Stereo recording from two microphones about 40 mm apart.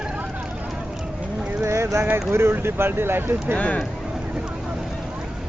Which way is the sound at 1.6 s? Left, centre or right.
Right.